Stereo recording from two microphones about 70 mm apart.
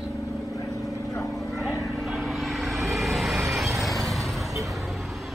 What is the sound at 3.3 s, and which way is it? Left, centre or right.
Vehicle, right.